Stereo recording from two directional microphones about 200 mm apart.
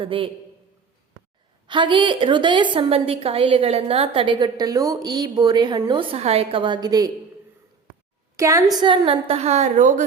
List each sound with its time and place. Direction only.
0.0 s a woman's voice: 25° right (ahead or behind)
1.6 s a woman's voice: 25° right (ahead or behind)
8.4 s a woman's voice: 15° right (ahead or behind); by 10.0 s 40° right (ahead or behind)